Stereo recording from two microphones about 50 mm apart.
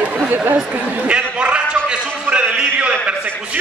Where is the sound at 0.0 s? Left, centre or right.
Right.